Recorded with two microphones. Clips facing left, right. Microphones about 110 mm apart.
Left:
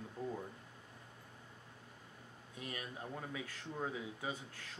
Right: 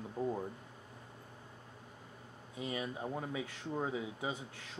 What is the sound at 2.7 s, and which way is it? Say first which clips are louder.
Speech: right 7 dB; 20° right (ahead or behind).